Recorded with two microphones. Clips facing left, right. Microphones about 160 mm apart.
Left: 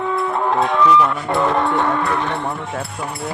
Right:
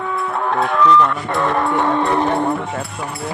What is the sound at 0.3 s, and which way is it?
Music, 10° left (ahead or behind).